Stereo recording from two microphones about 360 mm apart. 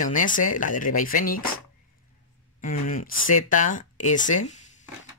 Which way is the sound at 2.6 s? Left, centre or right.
Left.